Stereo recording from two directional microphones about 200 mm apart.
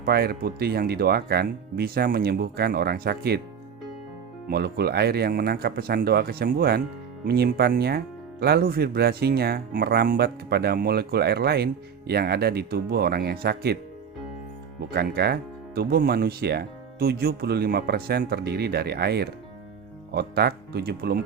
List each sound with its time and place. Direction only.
0.0 s speech: 50° right (ahead or behind)
4.4 s speech: 50° right (ahead or behind)
14.9 s speech: 50° right (ahead or behind)